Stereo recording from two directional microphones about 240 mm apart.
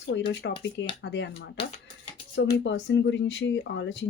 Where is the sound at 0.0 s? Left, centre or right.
Left.